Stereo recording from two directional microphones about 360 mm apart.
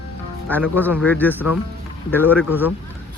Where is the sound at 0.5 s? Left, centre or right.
Centre.